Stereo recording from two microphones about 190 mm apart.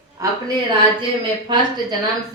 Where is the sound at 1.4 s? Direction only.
25° right (ahead or behind).